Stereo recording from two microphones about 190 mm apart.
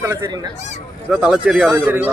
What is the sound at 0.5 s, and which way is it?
Speech, 40° left (ahead or behind).